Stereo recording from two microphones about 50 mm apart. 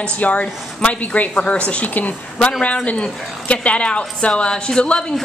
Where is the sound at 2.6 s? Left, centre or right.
Left.